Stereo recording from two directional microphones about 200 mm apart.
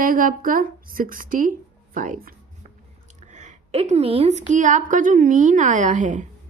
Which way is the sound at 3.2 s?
35° right (ahead or behind).